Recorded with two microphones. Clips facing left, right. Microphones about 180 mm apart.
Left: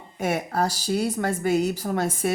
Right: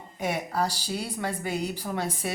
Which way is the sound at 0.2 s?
50° left (ahead or behind).